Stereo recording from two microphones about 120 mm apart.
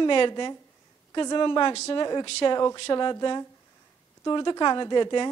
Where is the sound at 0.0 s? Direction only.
40° left (ahead or behind).